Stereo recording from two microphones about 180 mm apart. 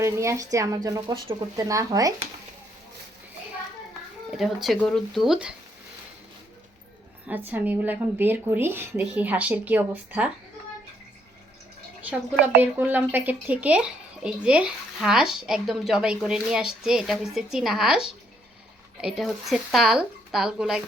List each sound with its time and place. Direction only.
0.0 s a woman's voice: 15° right (ahead or behind)
4.4 s speech: centre (ahead or behind)
7.3 s a woman's voice: 10° right (ahead or behind)
12.7 s a woman's voice: 10° right (ahead or behind)